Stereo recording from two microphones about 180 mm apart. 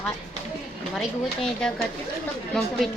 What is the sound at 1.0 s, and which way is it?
Speech, 5° left (ahead or behind).